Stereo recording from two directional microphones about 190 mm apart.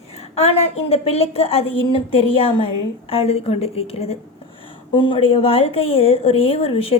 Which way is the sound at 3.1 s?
30° left (ahead or behind).